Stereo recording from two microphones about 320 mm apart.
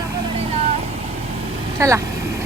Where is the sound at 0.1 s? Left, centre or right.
Centre.